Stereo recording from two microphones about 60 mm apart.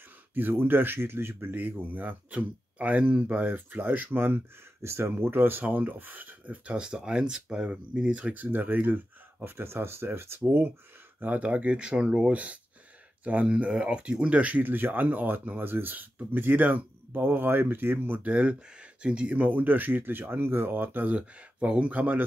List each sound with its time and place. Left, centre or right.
0.3 s speech: right
4.8 s speech: right
5.1 s speech: right
18.3 s speech: right